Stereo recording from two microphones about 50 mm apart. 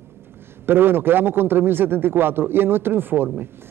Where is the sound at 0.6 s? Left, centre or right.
Right.